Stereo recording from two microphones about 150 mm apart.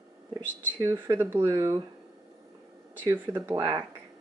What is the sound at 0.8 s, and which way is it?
Speech, 15° right (ahead or behind).